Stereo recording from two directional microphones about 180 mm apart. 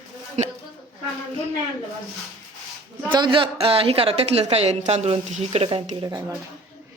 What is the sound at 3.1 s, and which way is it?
A woman's voice, 25° right (ahead or behind).